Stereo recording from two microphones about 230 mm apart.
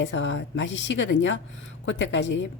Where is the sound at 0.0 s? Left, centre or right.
Left.